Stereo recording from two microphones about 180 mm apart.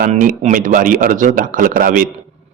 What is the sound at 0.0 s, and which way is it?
A man's voice, 50° right (ahead or behind).